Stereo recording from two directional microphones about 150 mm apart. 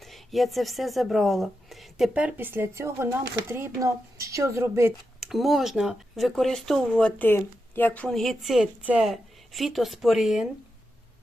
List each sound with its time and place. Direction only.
0.0 s speech: centre (ahead or behind); by 4.9 s 15° right (ahead or behind)
5.2 s speech: centre (ahead or behind)